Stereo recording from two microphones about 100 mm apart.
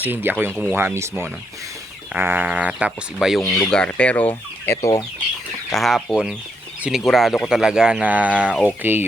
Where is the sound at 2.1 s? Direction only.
20° right (ahead or behind).